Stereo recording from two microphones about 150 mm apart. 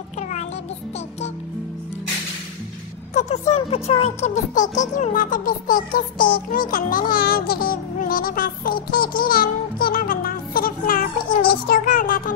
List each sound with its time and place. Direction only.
3.2 s speech: 50° left (ahead or behind); by 12.2 s 70° left (ahead or behind)